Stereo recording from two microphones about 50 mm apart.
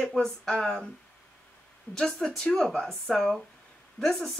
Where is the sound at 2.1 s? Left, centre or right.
Centre.